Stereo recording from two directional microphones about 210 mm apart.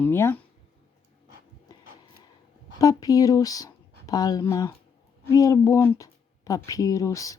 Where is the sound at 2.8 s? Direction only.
15° left (ahead or behind).